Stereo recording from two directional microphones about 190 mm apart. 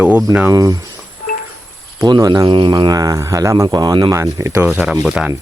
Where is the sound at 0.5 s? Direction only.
20° right (ahead or behind).